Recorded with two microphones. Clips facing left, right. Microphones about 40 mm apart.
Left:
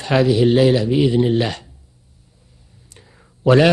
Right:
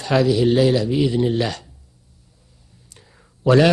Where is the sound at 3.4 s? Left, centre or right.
Left.